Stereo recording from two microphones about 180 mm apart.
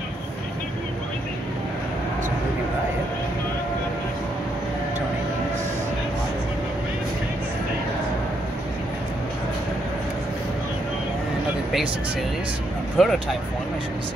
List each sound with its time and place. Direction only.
12.9 s speech: centre (ahead or behind)